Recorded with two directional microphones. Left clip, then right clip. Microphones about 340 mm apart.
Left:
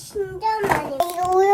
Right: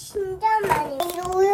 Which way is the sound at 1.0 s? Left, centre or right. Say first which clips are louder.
Left 3 dB; centre.